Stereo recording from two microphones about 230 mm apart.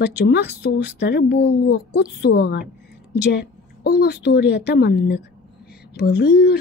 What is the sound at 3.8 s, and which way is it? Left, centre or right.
A woman's voice, left.